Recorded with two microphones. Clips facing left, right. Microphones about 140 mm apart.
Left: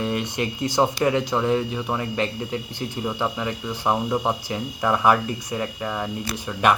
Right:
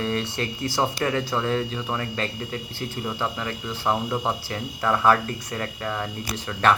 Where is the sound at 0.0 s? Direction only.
15° left (ahead or behind).